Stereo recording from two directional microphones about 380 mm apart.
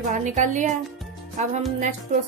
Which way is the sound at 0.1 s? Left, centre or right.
Centre.